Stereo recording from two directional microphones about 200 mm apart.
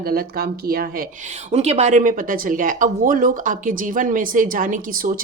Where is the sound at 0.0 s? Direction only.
50° right (ahead or behind).